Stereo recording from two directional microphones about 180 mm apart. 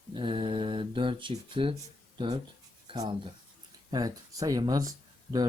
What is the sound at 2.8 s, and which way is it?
Speech, 30° right (ahead or behind).